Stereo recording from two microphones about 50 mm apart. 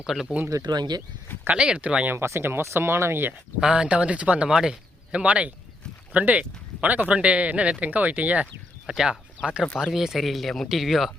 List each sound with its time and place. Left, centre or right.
0.0 s speech: centre
1.5 s speech: centre
2.1 s speech: right
3.6 s speech: centre
4.4 s speech: centre
5.2 s speech: right
8.9 s speech: centre